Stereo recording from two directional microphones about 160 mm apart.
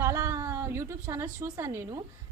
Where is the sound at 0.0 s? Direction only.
15° right (ahead or behind).